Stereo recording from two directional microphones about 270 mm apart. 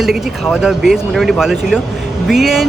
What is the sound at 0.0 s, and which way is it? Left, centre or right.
Speech, centre.